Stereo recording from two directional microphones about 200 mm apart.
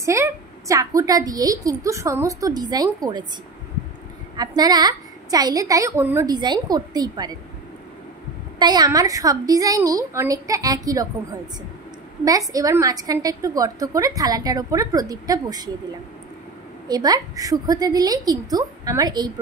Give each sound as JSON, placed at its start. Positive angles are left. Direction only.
{"t": 0.0, "sound": "a woman's voice", "side_deg": -15}
{"t": 4.4, "sound": "a woman's voice", "side_deg": -20}
{"t": 8.5, "sound": "a woman's voice", "side_deg": -20}
{"t": 12.3, "sound": "a woman's voice", "side_deg": -15}
{"t": 16.8, "sound": "a woman's voice", "side_deg": -20}